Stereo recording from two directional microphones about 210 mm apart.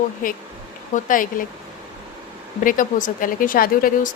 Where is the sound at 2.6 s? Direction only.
40° left (ahead or behind).